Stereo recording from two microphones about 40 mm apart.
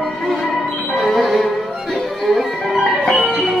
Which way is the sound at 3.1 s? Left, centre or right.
Right.